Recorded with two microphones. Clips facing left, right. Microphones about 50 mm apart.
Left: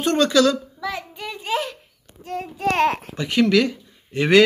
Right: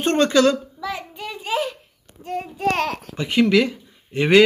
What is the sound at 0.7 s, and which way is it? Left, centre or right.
Child singing, centre.